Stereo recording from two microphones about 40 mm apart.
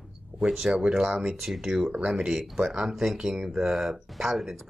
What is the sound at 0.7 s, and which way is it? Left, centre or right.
Speech, right.